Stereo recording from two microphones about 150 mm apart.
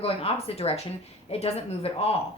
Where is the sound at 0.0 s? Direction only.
40° left (ahead or behind).